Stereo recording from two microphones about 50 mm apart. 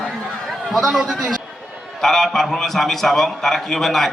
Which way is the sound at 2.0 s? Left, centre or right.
Centre.